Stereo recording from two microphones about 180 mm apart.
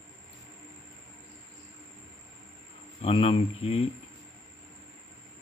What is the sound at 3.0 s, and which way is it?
Speech, 35° left (ahead or behind).